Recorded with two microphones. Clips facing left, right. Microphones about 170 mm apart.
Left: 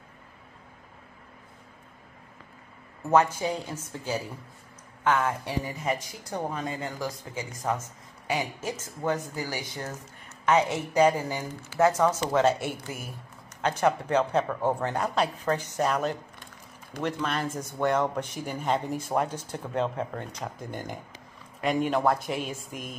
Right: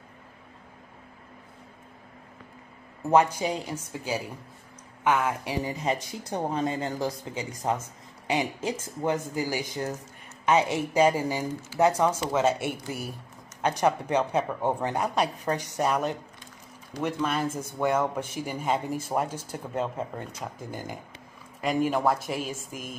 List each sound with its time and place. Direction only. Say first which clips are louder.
3.1 s speech: right 1 dB; 15° right (ahead or behind)
13.6 s speech: even; 15° right (ahead or behind)